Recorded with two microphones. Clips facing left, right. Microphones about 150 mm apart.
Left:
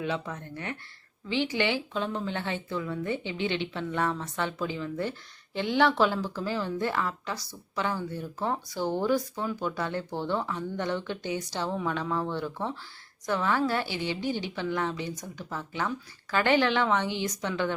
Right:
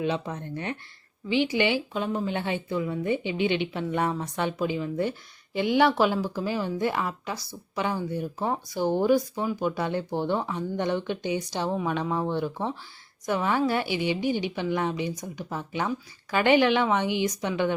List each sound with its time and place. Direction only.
0.0 s a woman's voice: 20° right (ahead or behind)